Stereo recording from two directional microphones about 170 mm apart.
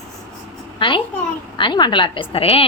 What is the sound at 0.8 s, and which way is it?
A woman's voice, 30° left (ahead or behind).